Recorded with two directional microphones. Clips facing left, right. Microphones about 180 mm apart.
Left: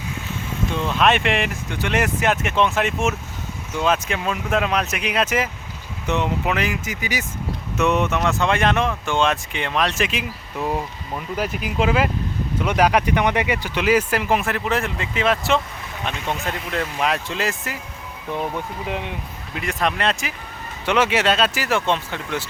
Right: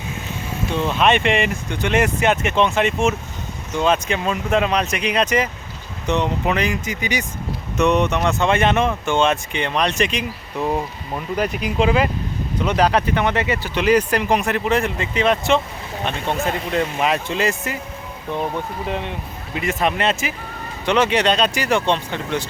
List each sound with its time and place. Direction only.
0.8 s speech: centre (ahead or behind)
16.1 s speech: 35° right (ahead or behind)
17.0 s speech: centre (ahead or behind)
18.9 s speech: 5° left (ahead or behind)